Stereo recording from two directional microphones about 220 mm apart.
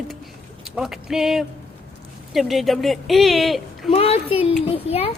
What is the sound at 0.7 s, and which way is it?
Speech, centre (ahead or behind).